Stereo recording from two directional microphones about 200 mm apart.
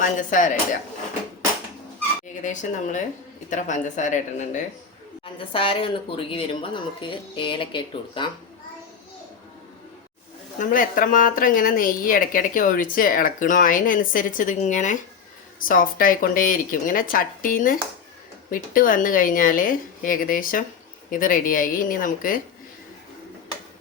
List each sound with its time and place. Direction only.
0.0 s speech: 40° left (ahead or behind)
2.4 s speech: 40° left (ahead or behind)
5.5 s speech: 25° left (ahead or behind)
10.6 s a woman's voice: 45° left (ahead or behind)